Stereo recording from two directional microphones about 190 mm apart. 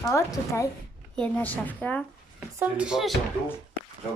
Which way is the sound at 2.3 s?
5° right (ahead or behind).